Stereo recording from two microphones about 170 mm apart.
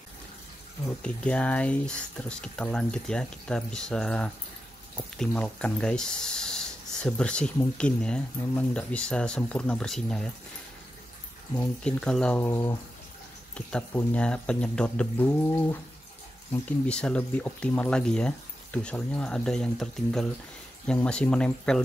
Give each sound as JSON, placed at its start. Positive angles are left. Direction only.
{"t": 1.0, "sound": "speech", "side_deg": 5}
{"t": 11.5, "sound": "speech", "side_deg": 10}
{"t": 12.4, "sound": "speech", "side_deg": 15}
{"t": 13.6, "sound": "speech", "side_deg": 5}